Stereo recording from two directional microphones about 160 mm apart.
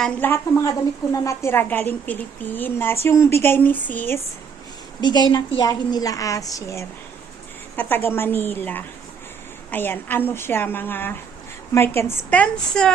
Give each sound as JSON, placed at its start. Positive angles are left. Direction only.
{"t": 0.0, "sound": "a woman's voice", "side_deg": 10}
{"t": 4.9, "sound": "a woman's voice", "side_deg": 25}